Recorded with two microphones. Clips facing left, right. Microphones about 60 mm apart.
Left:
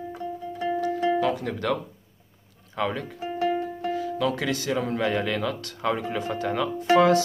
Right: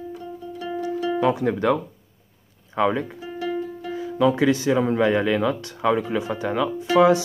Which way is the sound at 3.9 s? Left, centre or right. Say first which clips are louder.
Right 7 dB; centre.